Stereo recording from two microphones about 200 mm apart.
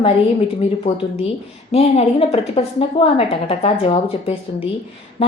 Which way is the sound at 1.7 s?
30° left (ahead or behind).